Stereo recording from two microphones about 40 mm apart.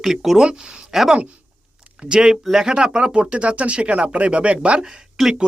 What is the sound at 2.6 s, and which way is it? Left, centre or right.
Speech, right.